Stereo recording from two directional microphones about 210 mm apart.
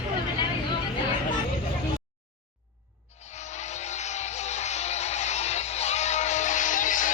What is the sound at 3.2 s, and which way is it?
Music, 35° left (ahead or behind).